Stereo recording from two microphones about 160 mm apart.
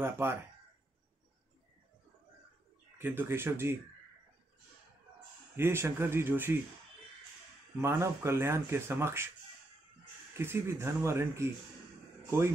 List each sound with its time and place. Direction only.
0.0 s speech: 15° right (ahead or behind)
3.0 s speech: 15° right (ahead or behind)
5.6 s speech: 15° right (ahead or behind)
7.8 s speech: 15° right (ahead or behind)
10.4 s speech: 15° right (ahead or behind)